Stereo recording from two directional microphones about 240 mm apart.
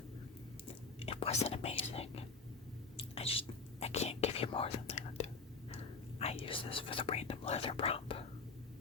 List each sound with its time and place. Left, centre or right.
0.9 s whispering: left
5.7 s speech: left